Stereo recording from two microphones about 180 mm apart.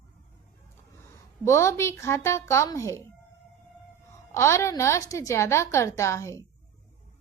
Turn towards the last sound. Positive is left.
turn(degrees=15)  # may be behind; listen again after turning